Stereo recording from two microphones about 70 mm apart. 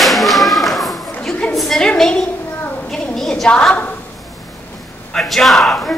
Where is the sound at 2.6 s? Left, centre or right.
Left.